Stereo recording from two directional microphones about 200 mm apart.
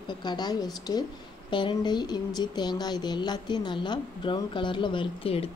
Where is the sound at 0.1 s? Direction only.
20° left (ahead or behind).